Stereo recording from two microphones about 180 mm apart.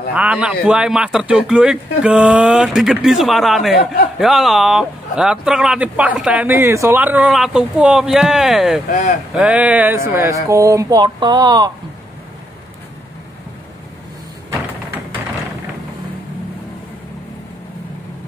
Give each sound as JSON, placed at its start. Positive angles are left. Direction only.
{"t": 0.1, "sound": "speech", "side_deg": -5}
{"t": 3.7, "sound": "speech", "side_deg": 60}
{"t": 4.2, "sound": "speech", "side_deg": 0}